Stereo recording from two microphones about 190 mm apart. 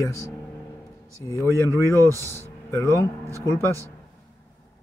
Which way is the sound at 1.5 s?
15° left (ahead or behind).